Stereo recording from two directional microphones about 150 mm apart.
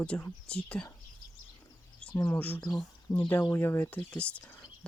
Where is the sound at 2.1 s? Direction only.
25° left (ahead or behind).